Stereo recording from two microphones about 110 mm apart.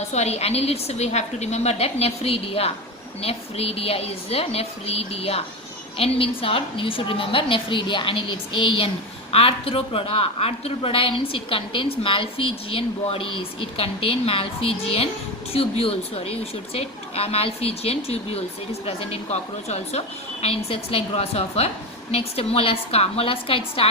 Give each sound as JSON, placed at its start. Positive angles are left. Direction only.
{"t": 0.1, "sound": "a woman's voice", "side_deg": 85}
{"t": 20.4, "sound": "a woman's voice", "side_deg": 60}